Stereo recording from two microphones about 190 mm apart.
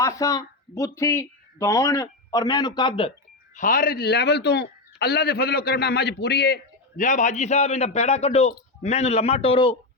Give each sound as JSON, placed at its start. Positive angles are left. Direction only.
{"t": 0.0, "sound": "speech", "side_deg": 15}
{"t": 3.5, "sound": "a man's voice", "side_deg": 45}